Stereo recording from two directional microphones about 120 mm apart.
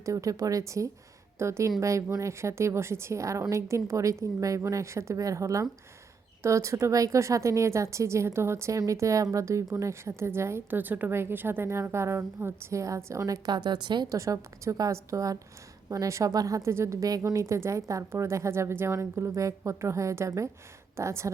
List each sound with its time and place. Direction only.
0.0 s a woman's voice: 25° right (ahead or behind)